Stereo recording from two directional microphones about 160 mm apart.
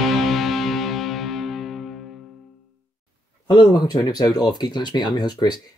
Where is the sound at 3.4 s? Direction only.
30° left (ahead or behind).